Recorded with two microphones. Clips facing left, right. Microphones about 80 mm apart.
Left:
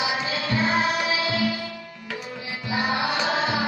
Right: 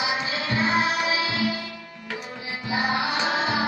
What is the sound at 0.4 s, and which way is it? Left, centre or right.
Music, right.